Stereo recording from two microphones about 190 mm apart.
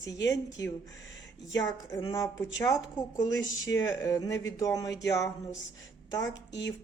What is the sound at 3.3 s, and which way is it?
Speech, 75° left (ahead or behind).